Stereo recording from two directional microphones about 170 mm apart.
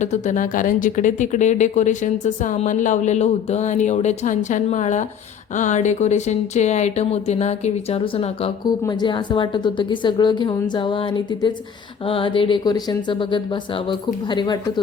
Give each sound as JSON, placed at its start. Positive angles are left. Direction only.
{"t": 0.0, "sound": "speech", "side_deg": 45}
{"t": 8.9, "sound": "a woman's voice", "side_deg": 25}